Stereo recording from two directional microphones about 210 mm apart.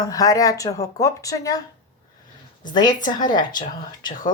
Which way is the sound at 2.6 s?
20° left (ahead or behind).